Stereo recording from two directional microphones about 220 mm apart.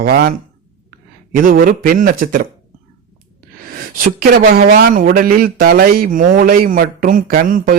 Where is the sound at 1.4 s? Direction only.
40° right (ahead or behind).